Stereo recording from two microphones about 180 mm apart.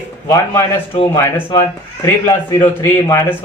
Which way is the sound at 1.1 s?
10° left (ahead or behind).